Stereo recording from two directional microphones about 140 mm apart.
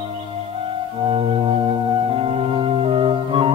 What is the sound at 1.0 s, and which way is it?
Music, 40° right (ahead or behind).